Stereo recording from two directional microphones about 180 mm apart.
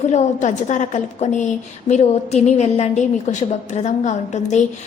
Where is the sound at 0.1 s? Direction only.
40° left (ahead or behind).